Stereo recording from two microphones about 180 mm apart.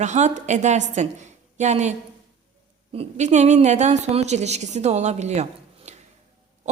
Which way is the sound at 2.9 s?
35° right (ahead or behind).